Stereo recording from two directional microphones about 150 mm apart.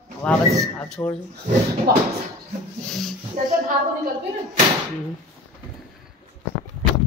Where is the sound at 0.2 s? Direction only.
5° left (ahead or behind).